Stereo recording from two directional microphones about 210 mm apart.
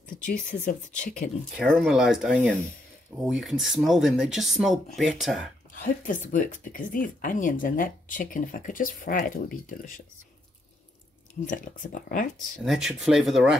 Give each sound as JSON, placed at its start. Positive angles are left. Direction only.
{"t": 0.2, "sound": "speech", "side_deg": 40}
{"t": 1.6, "sound": "speech", "side_deg": 0}
{"t": 5.7, "sound": "speech", "side_deg": 40}
{"t": 11.4, "sound": "speech", "side_deg": 40}
{"t": 12.6, "sound": "speech", "side_deg": 0}